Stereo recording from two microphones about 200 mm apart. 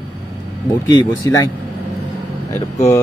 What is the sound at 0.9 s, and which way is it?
Speech, 15° left (ahead or behind).